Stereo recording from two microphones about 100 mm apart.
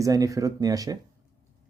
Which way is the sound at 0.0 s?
35° right (ahead or behind).